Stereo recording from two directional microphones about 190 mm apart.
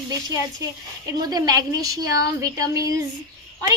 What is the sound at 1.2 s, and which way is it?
A woman's voice, 20° right (ahead or behind).